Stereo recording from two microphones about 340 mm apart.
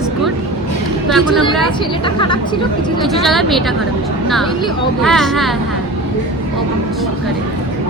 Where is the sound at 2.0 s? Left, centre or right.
Centre.